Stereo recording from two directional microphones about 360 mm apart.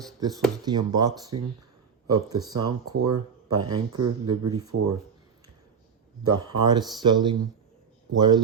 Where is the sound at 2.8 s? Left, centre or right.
Right.